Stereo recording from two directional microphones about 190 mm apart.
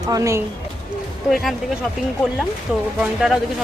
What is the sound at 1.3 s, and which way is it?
Speech, centre (ahead or behind).